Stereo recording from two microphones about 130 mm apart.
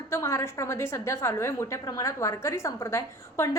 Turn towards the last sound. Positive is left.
turn(degrees=20)  # may be behind; listen again after turning